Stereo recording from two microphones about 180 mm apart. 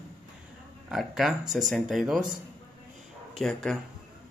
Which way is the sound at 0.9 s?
Centre (ahead or behind).